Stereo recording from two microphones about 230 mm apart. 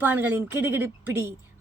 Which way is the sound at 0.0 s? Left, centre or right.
Centre.